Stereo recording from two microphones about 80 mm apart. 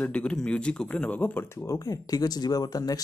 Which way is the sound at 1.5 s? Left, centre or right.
Left.